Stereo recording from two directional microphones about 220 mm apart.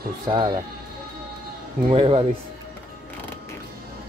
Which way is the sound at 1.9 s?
25° right (ahead or behind).